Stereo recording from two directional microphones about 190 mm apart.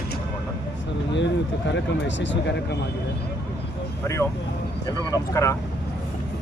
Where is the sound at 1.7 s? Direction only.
70° left (ahead or behind).